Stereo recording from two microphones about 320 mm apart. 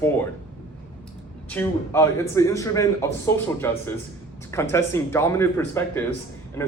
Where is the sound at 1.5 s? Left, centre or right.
Centre.